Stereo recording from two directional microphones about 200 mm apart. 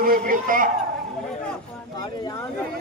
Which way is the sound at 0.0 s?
45° right (ahead or behind).